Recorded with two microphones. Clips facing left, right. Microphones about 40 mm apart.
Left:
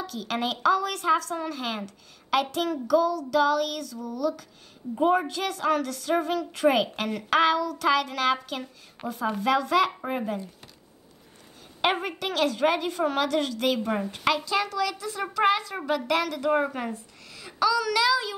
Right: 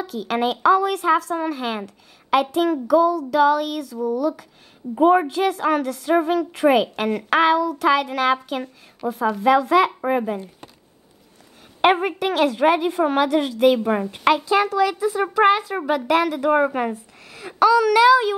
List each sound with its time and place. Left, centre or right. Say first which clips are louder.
0.0 s a woman's voice: right 7 dB; centre
11.8 s a woman's voice: right 8 dB; right
17.3 s speech: right 8 dB; right